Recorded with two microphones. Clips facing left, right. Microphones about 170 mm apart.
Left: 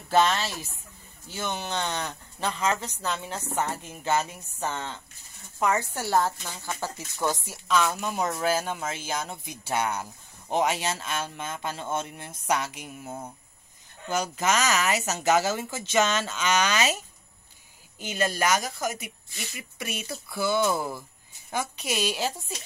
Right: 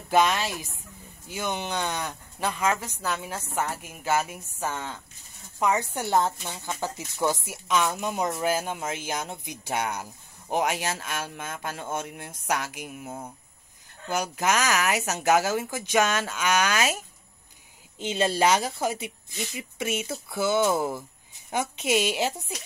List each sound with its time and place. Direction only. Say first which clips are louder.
0.1 s speech: even; 15° right (ahead or behind)
17.9 s speech: right 3 dB; 25° right (ahead or behind)